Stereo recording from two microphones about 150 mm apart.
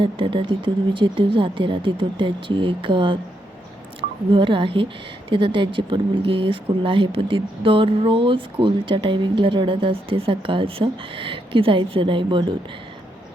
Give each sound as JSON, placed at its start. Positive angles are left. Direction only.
{"t": 0.0, "sound": "speech", "side_deg": -35}
{"t": 4.3, "sound": "speech", "side_deg": -35}